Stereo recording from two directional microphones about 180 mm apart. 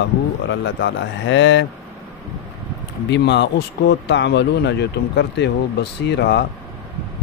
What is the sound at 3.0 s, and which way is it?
Speech, 75° left (ahead or behind).